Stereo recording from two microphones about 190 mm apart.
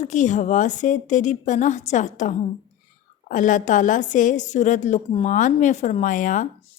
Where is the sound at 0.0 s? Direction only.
40° left (ahead or behind).